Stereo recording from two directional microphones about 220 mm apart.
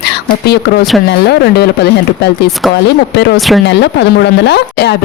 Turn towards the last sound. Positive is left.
turn(degrees=50)  # may be behind; listen again after turning